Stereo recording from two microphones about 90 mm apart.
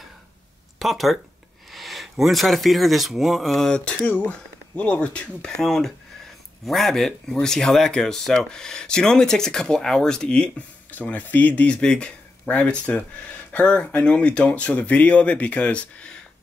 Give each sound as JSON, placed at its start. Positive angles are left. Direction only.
{"t": 0.7, "sound": "speech", "side_deg": 0}